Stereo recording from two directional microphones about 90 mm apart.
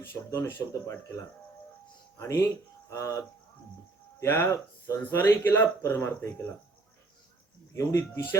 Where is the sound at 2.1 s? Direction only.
35° left (ahead or behind).